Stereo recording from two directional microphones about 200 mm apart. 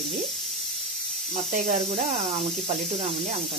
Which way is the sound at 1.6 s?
45° right (ahead or behind).